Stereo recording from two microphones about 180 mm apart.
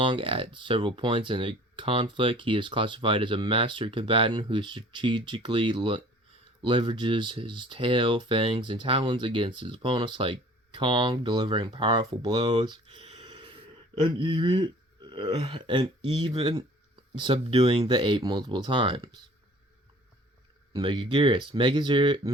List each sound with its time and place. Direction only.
0.0 s speech: 30° right (ahead or behind)
20.7 s speech: 30° right (ahead or behind)